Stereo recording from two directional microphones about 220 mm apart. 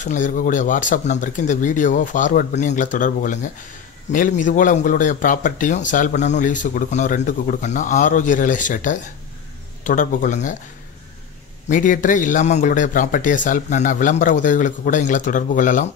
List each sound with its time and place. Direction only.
0.0 s speech: 35° left (ahead or behind)
4.4 s speech: 35° left (ahead or behind)
11.7 s speech: 35° left (ahead or behind)